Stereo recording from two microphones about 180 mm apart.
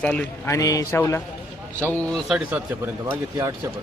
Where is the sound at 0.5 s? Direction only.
20° left (ahead or behind); by 3.2 s 10° right (ahead or behind).